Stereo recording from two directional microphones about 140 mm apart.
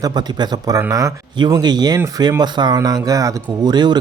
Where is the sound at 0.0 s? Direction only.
30° right (ahead or behind).